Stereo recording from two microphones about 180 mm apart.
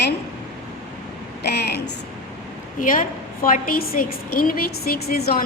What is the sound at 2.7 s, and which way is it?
A woman's voice, 45° left (ahead or behind).